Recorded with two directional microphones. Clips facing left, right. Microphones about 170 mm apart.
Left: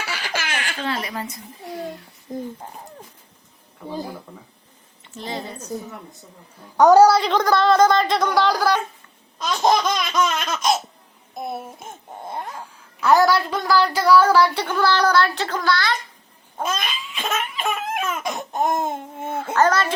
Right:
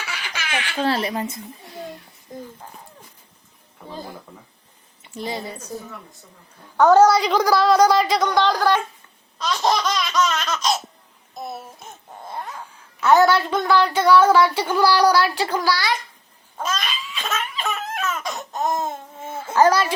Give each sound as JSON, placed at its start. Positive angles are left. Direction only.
{"t": 0.2, "sound": "baby laughter", "side_deg": 40}
{"t": 0.8, "sound": "a woman's voice", "side_deg": -30}
{"t": 2.3, "sound": "cat", "side_deg": 20}
{"t": 5.1, "sound": "a woman's voice", "side_deg": -10}
{"t": 6.7, "sound": "laughter", "side_deg": 10}
{"t": 7.1, "sound": "a woman's voice", "side_deg": -5}
{"t": 9.4, "sound": "laughter", "side_deg": 15}
{"t": 10.5, "sound": "laughter", "side_deg": 50}
{"t": 12.2, "sound": "cat", "side_deg": 20}
{"t": 13.0, "sound": "a woman's voice", "side_deg": 0}
{"t": 16.7, "sound": "cat", "side_deg": 55}
{"t": 17.3, "sound": "a sound", "side_deg": 15}
{"t": 18.3, "sound": "speech", "side_deg": 55}
{"t": 19.5, "sound": "a woman's voice", "side_deg": -10}